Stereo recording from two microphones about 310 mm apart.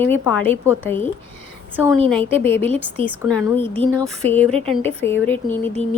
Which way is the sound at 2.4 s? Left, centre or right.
Centre.